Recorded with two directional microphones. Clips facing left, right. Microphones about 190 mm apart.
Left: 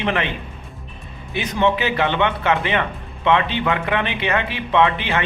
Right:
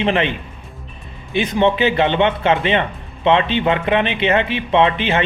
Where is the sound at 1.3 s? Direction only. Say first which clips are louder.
Right 4 dB; 25° right (ahead or behind).